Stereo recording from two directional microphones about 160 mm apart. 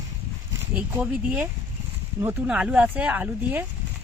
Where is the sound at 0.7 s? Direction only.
10° right (ahead or behind).